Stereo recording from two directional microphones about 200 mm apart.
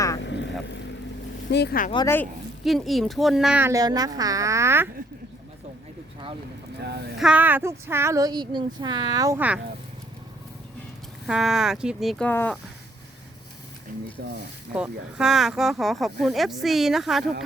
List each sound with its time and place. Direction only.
0.2 s vehicle: 60° left (ahead or behind)
1.5 s speech: 55° left (ahead or behind)
2.6 s speech: centre (ahead or behind)
6.7 s speech: 55° right (ahead or behind)
7.2 s speech: 5° right (ahead or behind)
11.3 s speech: centre (ahead or behind)
14.2 s speech: 50° right (ahead or behind)
14.7 s speech: 5° right (ahead or behind)